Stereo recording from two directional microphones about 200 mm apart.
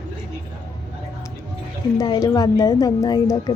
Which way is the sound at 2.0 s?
20° left (ahead or behind).